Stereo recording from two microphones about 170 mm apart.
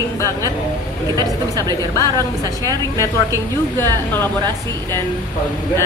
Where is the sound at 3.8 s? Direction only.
15° left (ahead or behind).